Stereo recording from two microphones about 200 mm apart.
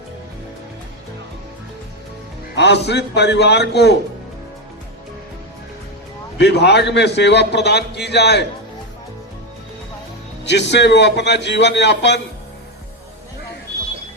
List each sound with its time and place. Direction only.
2.6 s a man's voice: 55° left (ahead or behind)
6.4 s a man's voice: 55° left (ahead or behind)
10.4 s a man's voice: 60° left (ahead or behind)